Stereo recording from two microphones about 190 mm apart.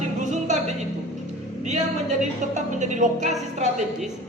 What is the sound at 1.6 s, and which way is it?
A man's voice, 40° right (ahead or behind).